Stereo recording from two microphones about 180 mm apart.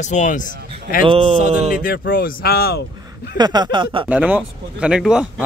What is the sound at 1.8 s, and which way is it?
Speech, 55° left (ahead or behind).